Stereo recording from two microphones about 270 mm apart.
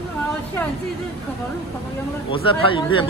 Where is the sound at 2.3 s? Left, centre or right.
Centre.